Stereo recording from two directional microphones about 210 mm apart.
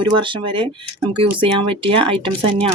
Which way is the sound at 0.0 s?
25° right (ahead or behind).